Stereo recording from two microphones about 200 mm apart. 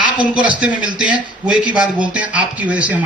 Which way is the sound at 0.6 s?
5° right (ahead or behind).